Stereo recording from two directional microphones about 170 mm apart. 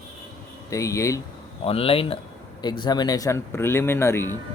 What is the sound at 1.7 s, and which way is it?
Speech, 35° left (ahead or behind).